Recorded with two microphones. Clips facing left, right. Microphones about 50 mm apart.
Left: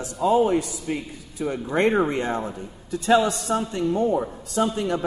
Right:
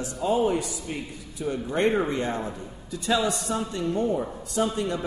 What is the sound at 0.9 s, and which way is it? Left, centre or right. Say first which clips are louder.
Speech: left 4 dB; left.